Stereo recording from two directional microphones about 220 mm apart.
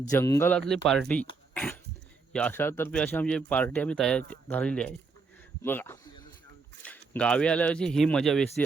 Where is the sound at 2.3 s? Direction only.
5° left (ahead or behind).